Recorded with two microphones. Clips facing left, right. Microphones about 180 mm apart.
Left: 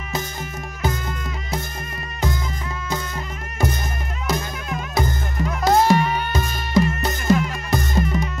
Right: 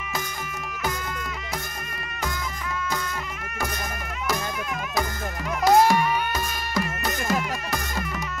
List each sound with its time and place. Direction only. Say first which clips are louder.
4.3 s music: left 3 dB; 25° left (ahead or behind)